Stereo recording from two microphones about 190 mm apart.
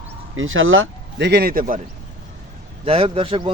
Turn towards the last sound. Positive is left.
turn(degrees=-30)  # may be behind; listen again after turning